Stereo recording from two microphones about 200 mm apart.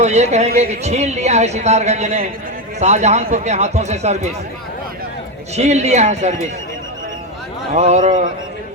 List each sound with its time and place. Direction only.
0.0 s speech: 35° right (ahead or behind)
5.5 s speech: 35° right (ahead or behind)
7.7 s speech: 35° right (ahead or behind)